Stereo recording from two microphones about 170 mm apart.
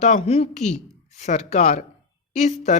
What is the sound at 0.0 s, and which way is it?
Speech, 40° left (ahead or behind).